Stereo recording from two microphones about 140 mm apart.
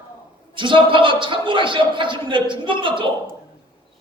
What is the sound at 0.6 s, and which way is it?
A man's voice, 35° right (ahead or behind).